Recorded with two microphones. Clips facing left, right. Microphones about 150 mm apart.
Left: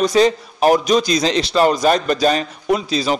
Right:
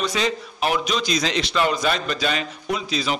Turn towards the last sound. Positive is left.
turn(degrees=35)  # may be behind; listen again after turning